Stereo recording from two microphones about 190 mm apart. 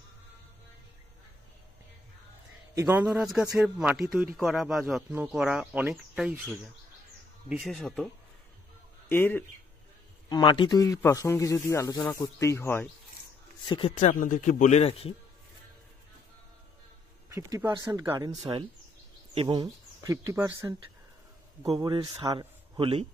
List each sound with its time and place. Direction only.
2.7 s speech: 10° right (ahead or behind)
9.1 s a man's voice: 10° left (ahead or behind)
10.3 s a man's voice: 25° left (ahead or behind)
13.7 s speech: 30° left (ahead or behind)
13.9 s a man's voice: 45° left (ahead or behind)
17.3 s speech: 15° right (ahead or behind)
21.6 s a man's voice: 20° right (ahead or behind)